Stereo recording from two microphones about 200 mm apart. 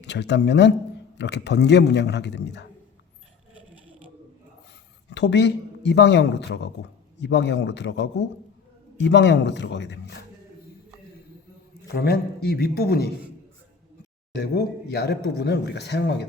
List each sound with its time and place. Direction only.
0.0 s speech: 60° left (ahead or behind)
5.0 s speech: 60° left (ahead or behind)
11.9 s a man's voice: 50° left (ahead or behind)
14.3 s speech: 55° left (ahead or behind)